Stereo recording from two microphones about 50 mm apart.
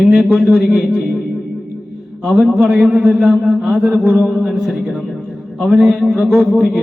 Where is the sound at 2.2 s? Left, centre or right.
Centre.